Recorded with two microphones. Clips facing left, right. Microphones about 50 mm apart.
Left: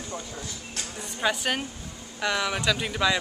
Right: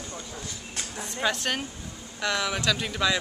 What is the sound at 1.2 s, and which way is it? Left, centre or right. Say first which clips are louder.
Speech: left 1 dB; centre.